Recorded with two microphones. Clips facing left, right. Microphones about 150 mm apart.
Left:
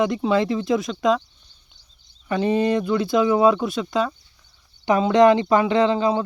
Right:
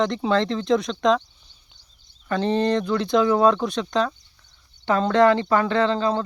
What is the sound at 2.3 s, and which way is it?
Speech, 10° left (ahead or behind).